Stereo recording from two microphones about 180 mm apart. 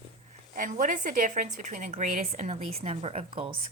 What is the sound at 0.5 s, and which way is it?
A woman's voice, 45° right (ahead or behind).